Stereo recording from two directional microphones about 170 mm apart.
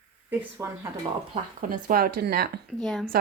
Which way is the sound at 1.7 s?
55° right (ahead or behind).